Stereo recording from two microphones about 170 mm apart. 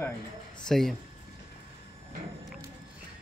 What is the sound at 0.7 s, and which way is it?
Speech, centre (ahead or behind).